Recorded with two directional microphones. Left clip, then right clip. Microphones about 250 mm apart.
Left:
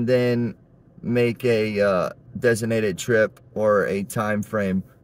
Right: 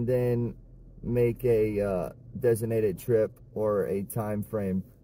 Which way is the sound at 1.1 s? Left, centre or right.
Left.